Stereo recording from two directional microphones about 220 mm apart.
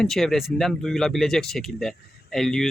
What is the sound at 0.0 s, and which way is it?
Speech, centre (ahead or behind).